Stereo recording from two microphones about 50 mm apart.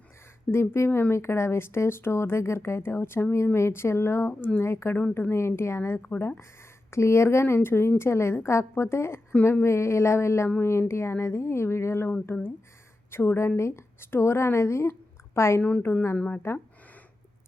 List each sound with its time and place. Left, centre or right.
0.5 s speech: left
4.7 s speech: left
6.1 s speech: left
6.9 s speech: left
7.4 s speech: left
9.4 s speech: left
9.6 s speech: left
12.2 s a woman's voice: left
16.1 s speech: left